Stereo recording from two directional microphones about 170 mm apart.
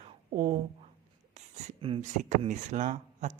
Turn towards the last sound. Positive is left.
turn(degrees=-45)  # may be behind; listen again after turning